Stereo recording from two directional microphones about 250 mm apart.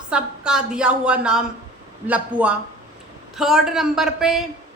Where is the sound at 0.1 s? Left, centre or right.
Centre.